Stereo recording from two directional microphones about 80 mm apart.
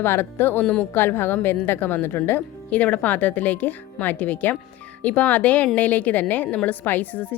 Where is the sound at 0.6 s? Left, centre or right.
Centre.